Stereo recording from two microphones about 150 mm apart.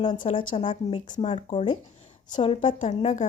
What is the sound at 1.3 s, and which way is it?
Speech, 50° left (ahead or behind).